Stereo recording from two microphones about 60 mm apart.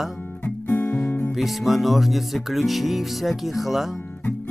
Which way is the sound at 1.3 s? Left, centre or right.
Centre.